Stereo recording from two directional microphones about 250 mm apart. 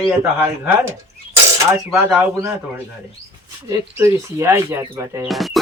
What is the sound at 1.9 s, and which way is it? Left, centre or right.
Speech, centre.